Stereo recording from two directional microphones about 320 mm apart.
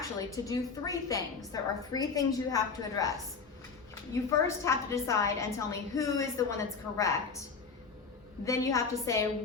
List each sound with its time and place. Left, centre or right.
0.4 s a woman's voice: centre
8.4 s a woman's voice: centre